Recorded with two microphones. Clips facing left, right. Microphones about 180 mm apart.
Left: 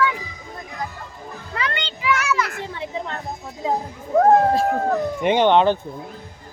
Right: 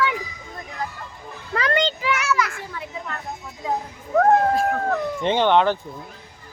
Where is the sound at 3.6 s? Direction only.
25° left (ahead or behind).